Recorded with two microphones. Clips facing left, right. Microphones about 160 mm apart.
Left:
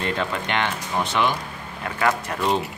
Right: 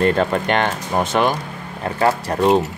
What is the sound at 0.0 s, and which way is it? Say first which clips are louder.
Speech: right 9 dB; 45° right (ahead or behind).